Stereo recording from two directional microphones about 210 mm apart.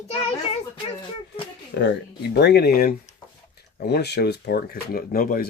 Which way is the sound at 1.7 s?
55° left (ahead or behind).